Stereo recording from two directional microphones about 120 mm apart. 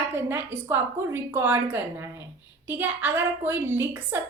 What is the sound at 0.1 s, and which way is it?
A woman's voice, 15° right (ahead or behind).